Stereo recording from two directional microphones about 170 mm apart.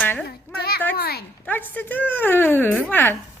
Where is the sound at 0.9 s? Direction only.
65° left (ahead or behind).